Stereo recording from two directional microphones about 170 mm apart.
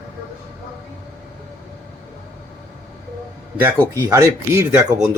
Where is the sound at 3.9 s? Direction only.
20° right (ahead or behind).